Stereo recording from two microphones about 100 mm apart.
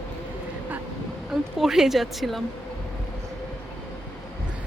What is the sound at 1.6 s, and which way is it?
Speech, 5° right (ahead or behind).